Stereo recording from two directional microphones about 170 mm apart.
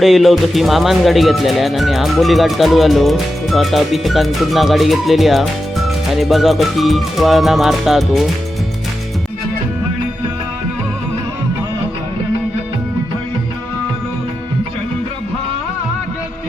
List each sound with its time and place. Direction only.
0.0 s speech: centre (ahead or behind)